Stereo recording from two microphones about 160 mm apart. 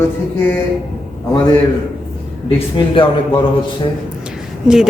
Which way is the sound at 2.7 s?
30° left (ahead or behind).